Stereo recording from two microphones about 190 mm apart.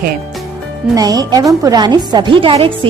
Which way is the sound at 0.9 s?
20° right (ahead or behind).